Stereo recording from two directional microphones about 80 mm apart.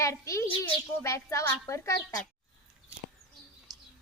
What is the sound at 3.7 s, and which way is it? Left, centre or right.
Chirp, right.